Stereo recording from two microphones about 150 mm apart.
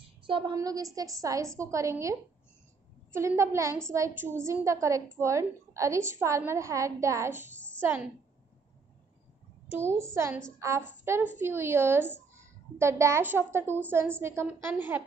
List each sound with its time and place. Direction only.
0.0 s a sound: 35° right (ahead or behind)
0.6 s a woman's voice: 20° right (ahead or behind)
9.9 s a woman's voice: 20° right (ahead or behind)